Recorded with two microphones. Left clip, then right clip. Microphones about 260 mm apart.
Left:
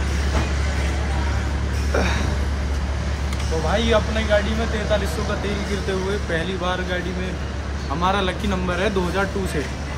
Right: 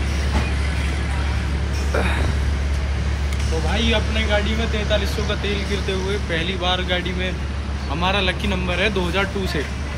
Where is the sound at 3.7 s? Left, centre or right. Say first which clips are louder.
Left 2 dB; centre.